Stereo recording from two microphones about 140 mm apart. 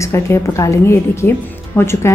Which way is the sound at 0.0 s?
20° left (ahead or behind).